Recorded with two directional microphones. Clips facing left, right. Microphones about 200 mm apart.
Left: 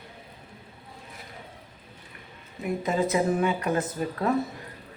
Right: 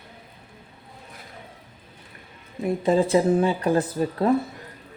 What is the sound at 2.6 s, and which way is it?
Speech, 30° right (ahead or behind).